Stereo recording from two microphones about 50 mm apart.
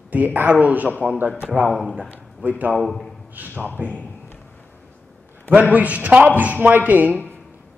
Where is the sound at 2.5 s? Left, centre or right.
Right.